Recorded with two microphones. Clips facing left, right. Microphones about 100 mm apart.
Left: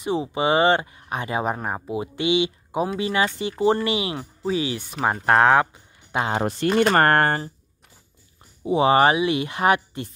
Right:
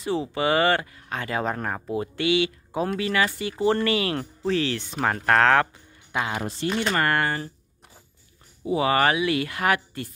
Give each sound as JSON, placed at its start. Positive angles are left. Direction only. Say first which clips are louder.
{"t": 0.0, "sound": "speech", "louder": "left 2 dB", "side_deg": 20}
{"t": 6.1, "sound": "speech", "louder": "left 4 dB", "side_deg": 30}
{"t": 6.4, "sound": "speech", "louder": "left 7 dB", "side_deg": 50}
{"t": 8.6, "sound": "speech", "louder": "left 4 dB", "side_deg": 25}